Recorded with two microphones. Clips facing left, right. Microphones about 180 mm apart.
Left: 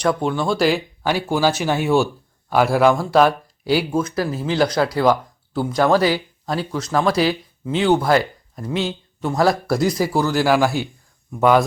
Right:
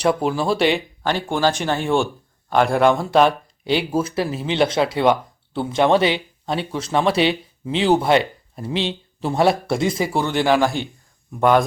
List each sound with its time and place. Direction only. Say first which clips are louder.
0.4 s speech: left 1 dB; centre (ahead or behind)
4.0 s speech: even; 25° right (ahead or behind)
10.0 s speech: left 2 dB; 5° left (ahead or behind)